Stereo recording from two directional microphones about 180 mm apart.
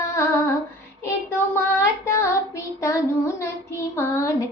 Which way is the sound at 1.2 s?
15° left (ahead or behind).